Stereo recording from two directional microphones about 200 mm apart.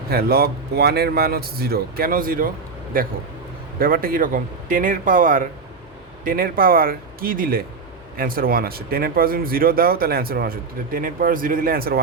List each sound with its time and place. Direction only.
0.1 s speech: 50° right (ahead or behind)